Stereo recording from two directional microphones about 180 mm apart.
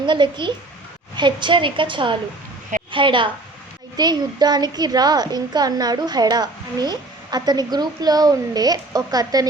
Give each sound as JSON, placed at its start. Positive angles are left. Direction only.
{"t": 0.0, "sound": "a child's voice", "side_deg": -25}